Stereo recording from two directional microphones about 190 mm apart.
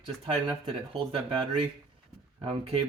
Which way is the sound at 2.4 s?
30° right (ahead or behind).